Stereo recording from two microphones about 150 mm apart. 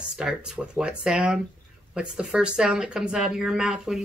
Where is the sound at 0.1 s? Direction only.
5° right (ahead or behind).